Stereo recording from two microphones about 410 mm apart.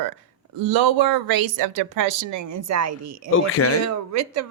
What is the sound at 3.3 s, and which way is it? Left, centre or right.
Speech, left.